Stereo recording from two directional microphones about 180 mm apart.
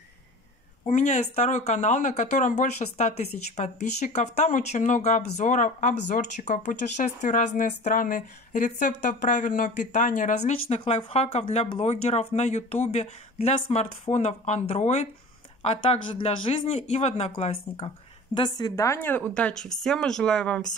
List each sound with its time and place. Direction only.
0.8 s speech: 40° left (ahead or behind)
10.8 s speech: 30° left (ahead or behind); by 20.6 s 5° left (ahead or behind)